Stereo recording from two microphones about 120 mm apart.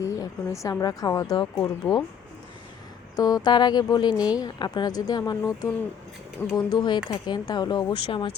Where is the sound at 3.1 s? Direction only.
30° left (ahead or behind); by 8.3 s 45° left (ahead or behind).